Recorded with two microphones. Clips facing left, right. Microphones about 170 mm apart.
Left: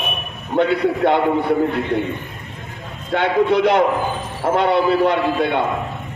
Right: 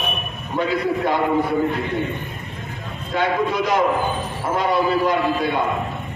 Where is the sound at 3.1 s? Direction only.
65° left (ahead or behind).